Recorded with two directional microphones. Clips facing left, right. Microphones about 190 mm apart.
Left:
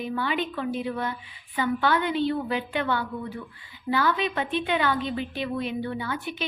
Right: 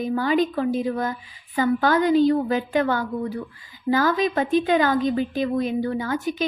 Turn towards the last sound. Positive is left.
turn(degrees=-40)  # may be behind; listen again after turning